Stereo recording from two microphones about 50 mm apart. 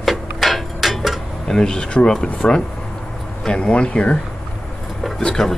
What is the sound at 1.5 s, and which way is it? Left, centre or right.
Speech, centre.